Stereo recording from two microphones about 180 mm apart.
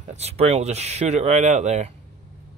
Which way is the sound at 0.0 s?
35° right (ahead or behind).